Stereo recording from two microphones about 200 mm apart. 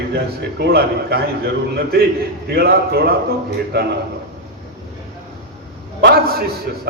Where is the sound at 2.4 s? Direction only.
50° right (ahead or behind).